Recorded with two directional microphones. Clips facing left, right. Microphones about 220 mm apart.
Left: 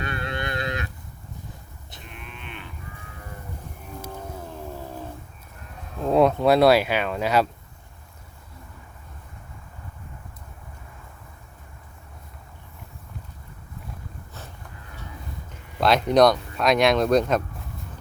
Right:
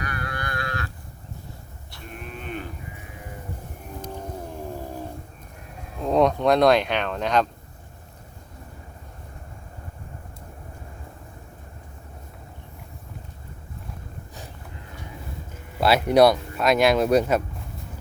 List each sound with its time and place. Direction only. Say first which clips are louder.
0.0 s moo: left 2 dB; 25° left (ahead or behind)
2.0 s cattle: right 7 dB; 40° right (ahead or behind)
4.1 s cat: right 3 dB; 10° right (ahead or behind)
6.0 s speech: left 1 dB; 5° left (ahead or behind)
15.8 s speech: right 1 dB; 5° right (ahead or behind)